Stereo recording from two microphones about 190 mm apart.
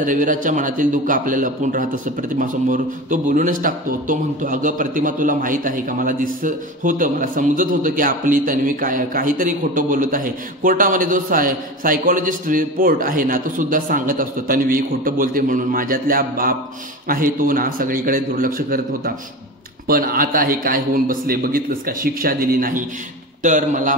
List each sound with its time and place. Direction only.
0.0 s a man's voice: 45° right (ahead or behind)